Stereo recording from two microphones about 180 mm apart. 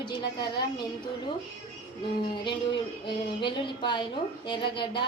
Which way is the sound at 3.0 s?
25° left (ahead or behind).